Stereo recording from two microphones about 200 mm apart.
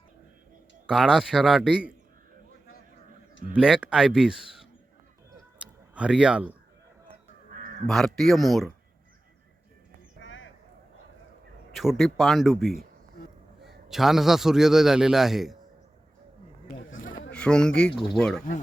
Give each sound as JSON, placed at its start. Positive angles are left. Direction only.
{"t": 0.9, "sound": "a man's voice", "side_deg": -5}
{"t": 3.5, "sound": "a man's voice", "side_deg": -5}
{"t": 5.5, "sound": "a sound", "side_deg": -5}
{"t": 7.9, "sound": "a man's voice", "side_deg": 0}
{"t": 10.2, "sound": "a sound", "side_deg": 75}
{"t": 11.7, "sound": "a man's voice", "side_deg": 0}
{"t": 17.3, "sound": "a man's voice", "side_deg": 5}